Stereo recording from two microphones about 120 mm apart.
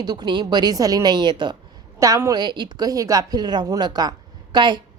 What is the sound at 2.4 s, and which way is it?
A woman's voice, 40° right (ahead or behind).